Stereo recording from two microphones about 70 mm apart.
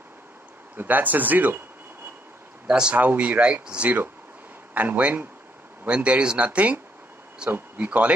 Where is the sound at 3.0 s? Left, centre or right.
Right.